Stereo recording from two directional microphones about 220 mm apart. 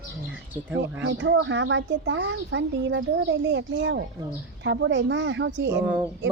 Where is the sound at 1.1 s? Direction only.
60° right (ahead or behind).